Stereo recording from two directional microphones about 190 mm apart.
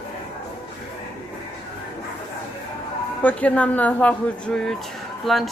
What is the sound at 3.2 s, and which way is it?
Speech, 5° left (ahead or behind).